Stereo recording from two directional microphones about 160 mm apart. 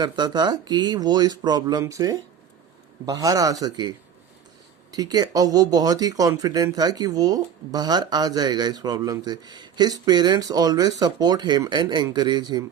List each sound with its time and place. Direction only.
0.0 s speech: 25° right (ahead or behind)